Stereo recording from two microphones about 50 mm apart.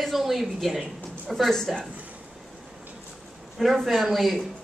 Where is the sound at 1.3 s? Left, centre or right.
Centre.